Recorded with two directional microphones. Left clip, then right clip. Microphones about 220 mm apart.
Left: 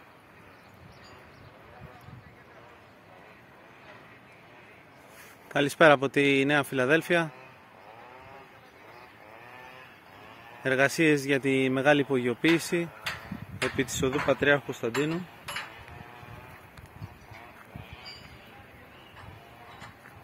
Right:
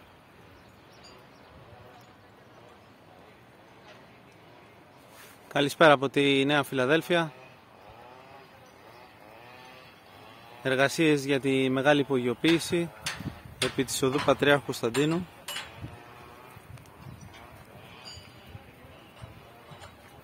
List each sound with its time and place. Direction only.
5.5 s a man's voice: centre (ahead or behind)
10.6 s a man's voice: centre (ahead or behind)
13.0 s a sound: 50° right (ahead or behind)
13.7 s speech: 15° right (ahead or behind)